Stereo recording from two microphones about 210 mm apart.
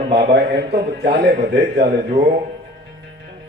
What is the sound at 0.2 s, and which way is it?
A man's voice, 50° right (ahead or behind).